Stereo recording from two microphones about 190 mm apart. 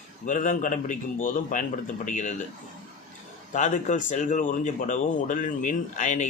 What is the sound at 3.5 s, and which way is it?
A man's voice, 40° left (ahead or behind).